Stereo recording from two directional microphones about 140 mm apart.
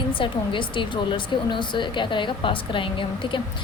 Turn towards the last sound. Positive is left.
turn(degrees=35)  # may be behind; listen again after turning